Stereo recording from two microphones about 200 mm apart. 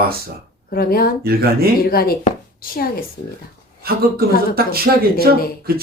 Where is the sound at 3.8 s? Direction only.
50° right (ahead or behind).